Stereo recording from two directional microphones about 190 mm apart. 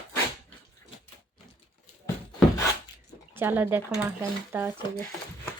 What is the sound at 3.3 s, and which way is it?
A woman's voice, 10° right (ahead or behind).